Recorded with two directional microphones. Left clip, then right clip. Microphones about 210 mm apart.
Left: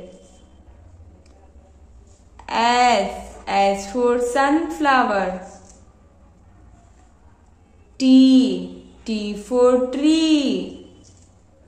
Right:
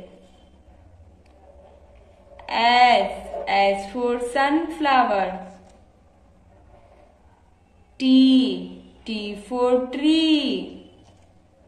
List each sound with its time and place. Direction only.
2.3 s a sound: 30° left (ahead or behind)
3.4 s a woman's voice: 30° left (ahead or behind)
8.0 s a woman's voice: 25° left (ahead or behind)